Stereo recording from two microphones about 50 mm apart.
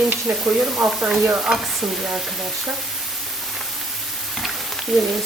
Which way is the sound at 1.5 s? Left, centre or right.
Centre.